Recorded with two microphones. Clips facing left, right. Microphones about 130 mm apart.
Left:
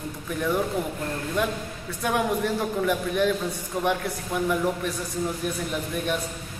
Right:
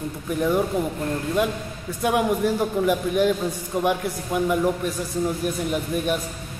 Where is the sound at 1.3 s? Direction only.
15° right (ahead or behind).